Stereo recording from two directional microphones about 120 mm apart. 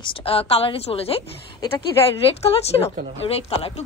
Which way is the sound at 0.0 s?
50° left (ahead or behind).